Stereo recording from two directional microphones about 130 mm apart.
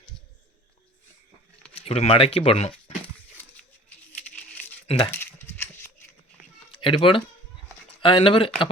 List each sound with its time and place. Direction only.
1.7 s speech: 50° left (ahead or behind)
3.3 s a sound: 10° left (ahead or behind)
6.8 s speech: 40° left (ahead or behind)